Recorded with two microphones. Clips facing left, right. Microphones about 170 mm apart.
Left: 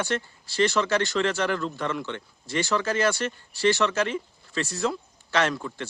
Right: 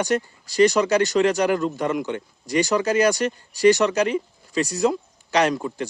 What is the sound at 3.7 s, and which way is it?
Speech, 40° right (ahead or behind).